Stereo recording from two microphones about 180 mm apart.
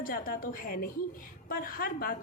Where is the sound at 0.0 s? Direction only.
50° left (ahead or behind).